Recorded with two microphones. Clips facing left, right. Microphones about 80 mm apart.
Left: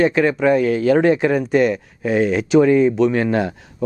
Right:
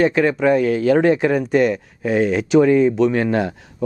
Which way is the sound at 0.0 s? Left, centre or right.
Centre.